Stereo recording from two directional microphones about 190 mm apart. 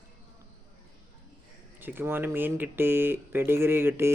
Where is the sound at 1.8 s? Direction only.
10° right (ahead or behind).